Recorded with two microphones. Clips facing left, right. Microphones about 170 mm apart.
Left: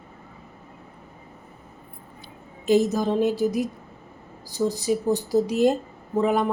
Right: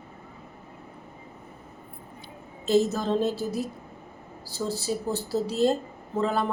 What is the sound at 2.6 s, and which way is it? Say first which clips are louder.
A woman's voice: left 3 dB; 15° left (ahead or behind).